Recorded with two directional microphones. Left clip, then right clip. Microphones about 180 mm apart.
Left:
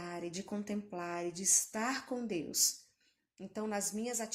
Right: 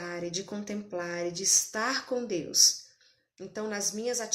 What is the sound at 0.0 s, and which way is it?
A woman's voice, 40° left (ahead or behind).